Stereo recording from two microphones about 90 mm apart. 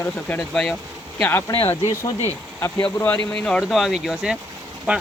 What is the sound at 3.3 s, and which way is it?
Speech, 10° left (ahead or behind).